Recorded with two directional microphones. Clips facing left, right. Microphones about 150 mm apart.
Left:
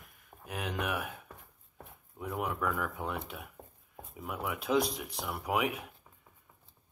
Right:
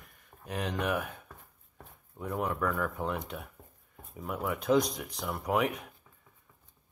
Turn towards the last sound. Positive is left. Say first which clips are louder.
# right 2 dB
turn(degrees=10)  # may be behind; listen again after turning